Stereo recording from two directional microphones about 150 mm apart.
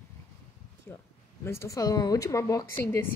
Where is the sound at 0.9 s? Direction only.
10° left (ahead or behind).